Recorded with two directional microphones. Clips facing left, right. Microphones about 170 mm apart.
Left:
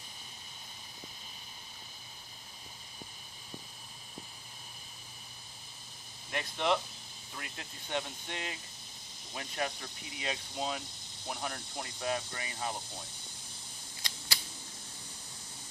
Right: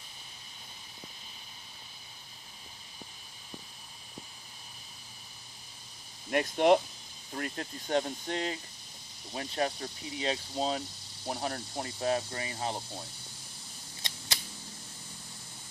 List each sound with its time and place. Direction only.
6.3 s speech: 50° right (ahead or behind); by 12.8 s 30° right (ahead or behind)
14.0 s camera: 25° right (ahead or behind)